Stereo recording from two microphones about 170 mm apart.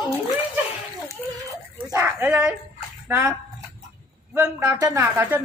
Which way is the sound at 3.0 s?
10° right (ahead or behind).